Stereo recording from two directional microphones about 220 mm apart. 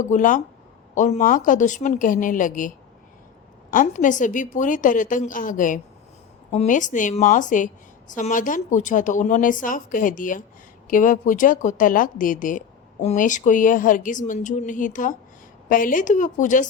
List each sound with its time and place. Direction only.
0.1 s a woman's voice: 35° left (ahead or behind)